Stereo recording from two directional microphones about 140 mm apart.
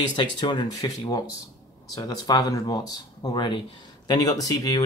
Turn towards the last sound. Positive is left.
turn(degrees=25)  # may be behind; listen again after turning